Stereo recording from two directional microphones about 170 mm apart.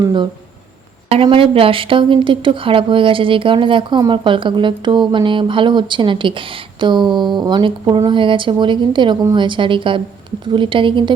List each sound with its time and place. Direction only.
0.0 s speech: 25° right (ahead or behind)